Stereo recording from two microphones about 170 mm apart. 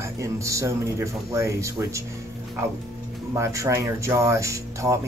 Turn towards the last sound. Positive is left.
turn(degrees=-20)  # may be behind; listen again after turning